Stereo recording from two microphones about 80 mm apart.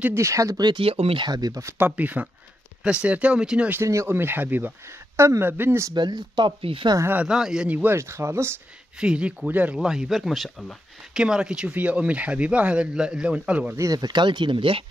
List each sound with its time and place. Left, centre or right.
0.1 s speech: right
0.7 s speech: right
1.3 s speech: right
1.8 s speech: centre
3.8 s speech: right
5.9 s speech: right
7.2 s speech: centre
7.7 s speech: right
9.0 s speech: centre
9.8 s speech: centre
11.2 s speech: centre
13.7 s speech: right